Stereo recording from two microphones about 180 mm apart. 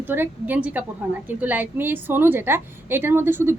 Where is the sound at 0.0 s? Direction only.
10° right (ahead or behind).